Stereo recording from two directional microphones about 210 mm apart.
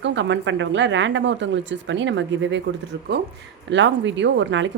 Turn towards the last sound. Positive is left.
turn(degrees=-60)  # may be behind; listen again after turning